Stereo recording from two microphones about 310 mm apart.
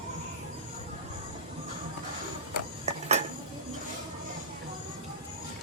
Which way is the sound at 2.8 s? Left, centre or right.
Right.